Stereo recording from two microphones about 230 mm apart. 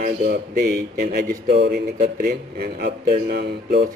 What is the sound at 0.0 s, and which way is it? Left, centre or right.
A man's voice, right.